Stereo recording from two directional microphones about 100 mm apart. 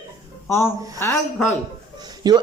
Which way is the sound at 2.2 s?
45° right (ahead or behind).